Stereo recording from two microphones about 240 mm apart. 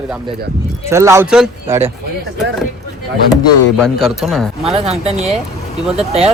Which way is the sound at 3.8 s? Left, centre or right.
Centre.